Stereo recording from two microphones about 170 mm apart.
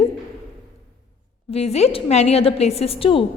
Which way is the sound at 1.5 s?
35° left (ahead or behind).